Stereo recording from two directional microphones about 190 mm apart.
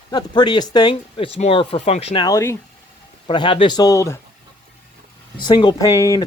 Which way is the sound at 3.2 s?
25° left (ahead or behind).